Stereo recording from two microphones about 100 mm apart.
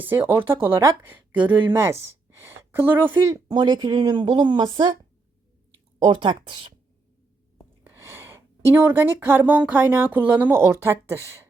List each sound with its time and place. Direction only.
0.0 s a woman's voice: 20° right (ahead or behind)
3.2 s speech: 35° right (ahead or behind)
3.6 s speech: 50° right (ahead or behind)
6.0 s speech: 55° right (ahead or behind)
7.9 s speech: 25° right (ahead or behind)